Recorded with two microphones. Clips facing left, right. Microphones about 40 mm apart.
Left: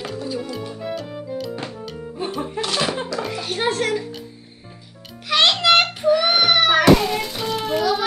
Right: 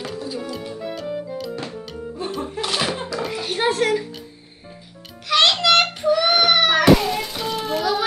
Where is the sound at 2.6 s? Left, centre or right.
Centre.